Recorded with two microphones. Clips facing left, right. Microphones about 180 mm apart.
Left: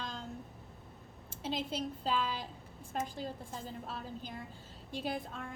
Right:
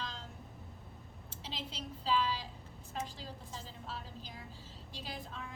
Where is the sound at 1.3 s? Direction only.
50° left (ahead or behind).